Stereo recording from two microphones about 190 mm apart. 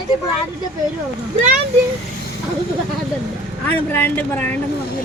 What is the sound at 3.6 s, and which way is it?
Speech, 10° left (ahead or behind).